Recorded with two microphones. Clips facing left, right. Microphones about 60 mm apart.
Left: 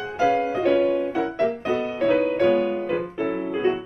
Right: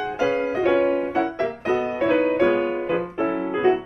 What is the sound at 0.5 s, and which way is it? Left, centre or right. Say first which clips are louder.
Music: right 1 dB; right.